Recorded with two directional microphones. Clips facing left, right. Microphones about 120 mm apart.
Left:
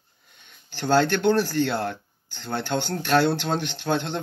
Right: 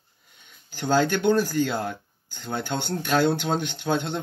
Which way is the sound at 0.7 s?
10° right (ahead or behind).